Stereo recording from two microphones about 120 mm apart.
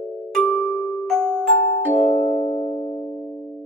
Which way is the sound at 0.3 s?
5° left (ahead or behind).